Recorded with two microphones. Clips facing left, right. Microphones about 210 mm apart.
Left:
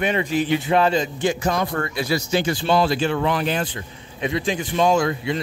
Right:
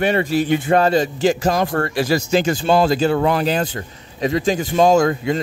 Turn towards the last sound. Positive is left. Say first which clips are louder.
# right 5 dB
turn(degrees=-45)  # may be behind; listen again after turning